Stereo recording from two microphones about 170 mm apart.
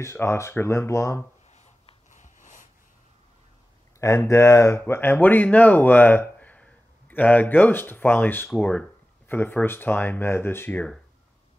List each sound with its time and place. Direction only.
0.0 s speech: 15° left (ahead or behind)
1.5 s a sound: 40° left (ahead or behind)
4.0 s speech: 15° left (ahead or behind)